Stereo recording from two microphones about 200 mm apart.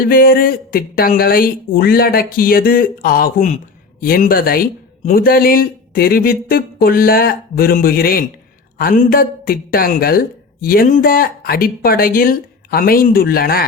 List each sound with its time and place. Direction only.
0.0 s speech: 45° left (ahead or behind)